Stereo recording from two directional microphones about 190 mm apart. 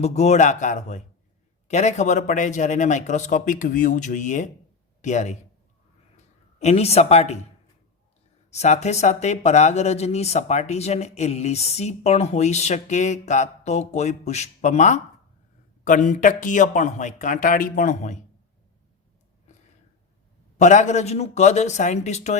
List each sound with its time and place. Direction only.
0.0 s speech: 35° left (ahead or behind)
8.4 s speech: 35° left (ahead or behind)
20.6 s speech: 40° left (ahead or behind)